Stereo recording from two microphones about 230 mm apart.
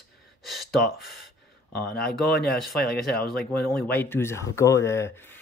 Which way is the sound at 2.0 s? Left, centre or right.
Centre.